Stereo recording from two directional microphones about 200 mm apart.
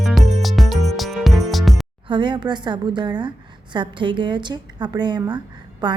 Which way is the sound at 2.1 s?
25° right (ahead or behind).